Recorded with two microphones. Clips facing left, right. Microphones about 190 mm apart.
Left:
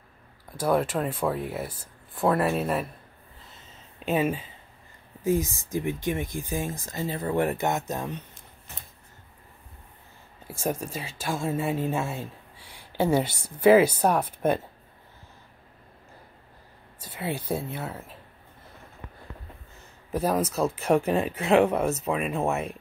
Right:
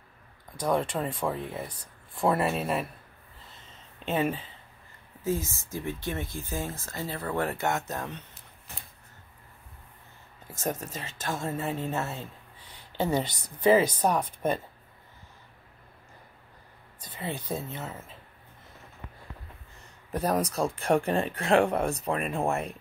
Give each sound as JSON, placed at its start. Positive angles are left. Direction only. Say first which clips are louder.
{"t": 0.6, "sound": "speech", "louder": "left 3 dB", "side_deg": 5}
{"t": 4.0, "sound": "speech", "louder": "left 3 dB", "side_deg": 10}
{"t": 10.4, "sound": "speech", "louder": "left 3 dB", "side_deg": 10}
{"t": 17.0, "sound": "speech", "louder": "left 4 dB", "side_deg": 10}
{"t": 20.1, "sound": "speech", "louder": "left 2 dB", "side_deg": 5}